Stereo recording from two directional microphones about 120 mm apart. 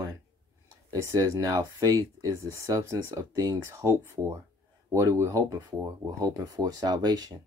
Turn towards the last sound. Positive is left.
turn(degrees=-35)  # may be behind; listen again after turning